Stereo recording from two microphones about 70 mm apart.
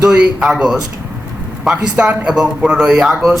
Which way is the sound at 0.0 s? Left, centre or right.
Centre.